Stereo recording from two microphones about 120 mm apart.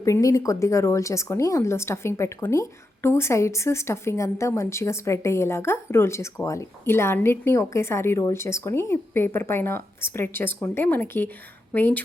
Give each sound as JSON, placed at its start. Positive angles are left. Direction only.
{"t": 0.0, "sound": "speech", "side_deg": 25}